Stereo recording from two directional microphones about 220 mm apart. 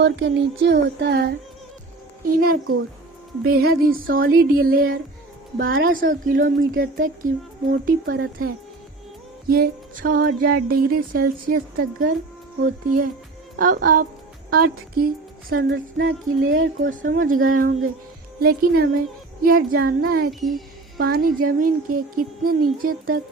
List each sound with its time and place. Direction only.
0.0 s a sound: 55° right (ahead or behind)
2.2 s music: 40° right (ahead or behind)
3.4 s a sound: 45° right (ahead or behind)
5.5 s music: 40° right (ahead or behind)
14.6 s speech: 85° right
16.0 s music: 65° right (ahead or behind)
16.8 s music: 35° right (ahead or behind)
18.3 s a sound: 45° right (ahead or behind)
19.4 s music: 40° right (ahead or behind)